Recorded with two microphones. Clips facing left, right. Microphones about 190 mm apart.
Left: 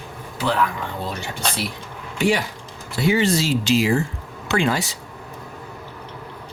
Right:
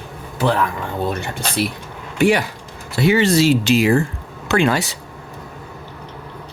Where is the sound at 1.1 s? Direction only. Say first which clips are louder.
Right 3 dB; 55° right (ahead or behind).